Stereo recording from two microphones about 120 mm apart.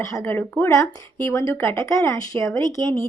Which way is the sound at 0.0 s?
25° left (ahead or behind).